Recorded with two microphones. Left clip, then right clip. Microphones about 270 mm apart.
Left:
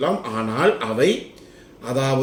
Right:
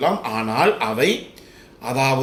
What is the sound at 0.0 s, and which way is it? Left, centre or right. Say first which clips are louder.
A man's voice: right 2 dB; centre.